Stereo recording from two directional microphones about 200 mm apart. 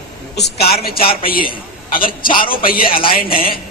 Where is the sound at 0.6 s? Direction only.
50° left (ahead or behind).